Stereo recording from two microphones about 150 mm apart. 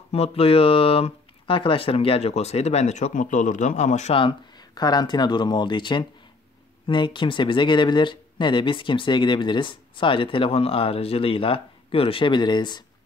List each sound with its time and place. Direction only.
0.1 s speech: 40° left (ahead or behind)
4.2 s speech: 30° left (ahead or behind)